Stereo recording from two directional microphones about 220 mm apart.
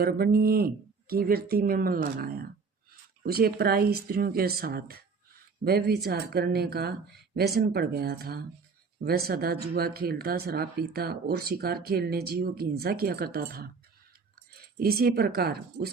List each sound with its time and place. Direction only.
0.0 s speech: 45° right (ahead or behind)